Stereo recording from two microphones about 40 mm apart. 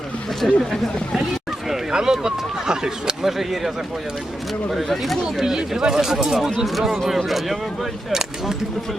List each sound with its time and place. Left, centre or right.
0.4 s speech: centre
1.9 s speech: centre
3.3 s speech: centre
5.4 s speech: centre
8.1 s speech: centre